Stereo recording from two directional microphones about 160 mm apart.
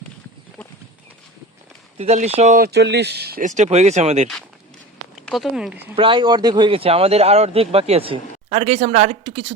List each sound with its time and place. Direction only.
2.0 s speech: 45° right (ahead or behind)
2.6 s speech: 85° right
3.4 s speech: 50° right (ahead or behind)
5.3 s speech: centre (ahead or behind)
6.0 s speech: 30° right (ahead or behind)